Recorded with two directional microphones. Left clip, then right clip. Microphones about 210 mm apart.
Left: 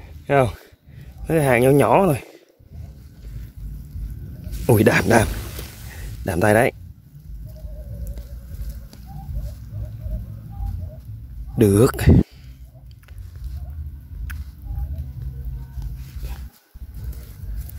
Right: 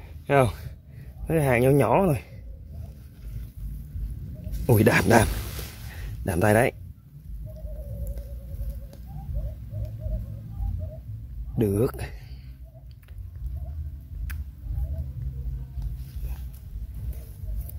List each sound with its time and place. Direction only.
0.3 s speech: centre (ahead or behind)
1.2 s speech: 15° left (ahead or behind)
4.8 s speech: centre (ahead or behind)
11.5 s speech: 15° left (ahead or behind)